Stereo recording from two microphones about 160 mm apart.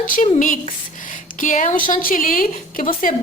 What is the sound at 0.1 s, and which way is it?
A woman's voice, 55° left (ahead or behind).